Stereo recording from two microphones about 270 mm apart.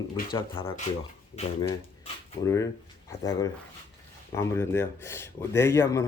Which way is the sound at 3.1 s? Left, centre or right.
Centre.